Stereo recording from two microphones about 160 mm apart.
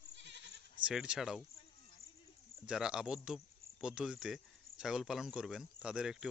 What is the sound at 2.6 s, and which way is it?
Speech, 5° right (ahead or behind).